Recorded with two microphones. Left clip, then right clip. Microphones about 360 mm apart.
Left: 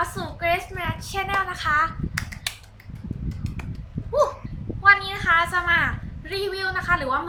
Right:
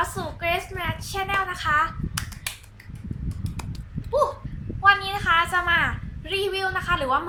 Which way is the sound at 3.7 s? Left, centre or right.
Centre.